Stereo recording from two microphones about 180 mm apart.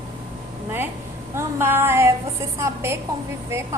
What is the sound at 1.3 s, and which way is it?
A woman's voice, 15° right (ahead or behind).